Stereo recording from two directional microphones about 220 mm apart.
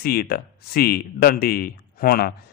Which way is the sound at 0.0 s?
45° left (ahead or behind).